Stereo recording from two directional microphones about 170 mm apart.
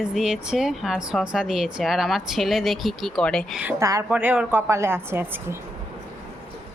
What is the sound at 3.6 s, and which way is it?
A woman's voice, 15° right (ahead or behind).